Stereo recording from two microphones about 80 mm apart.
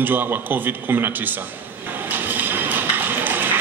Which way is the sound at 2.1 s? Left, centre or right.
Right.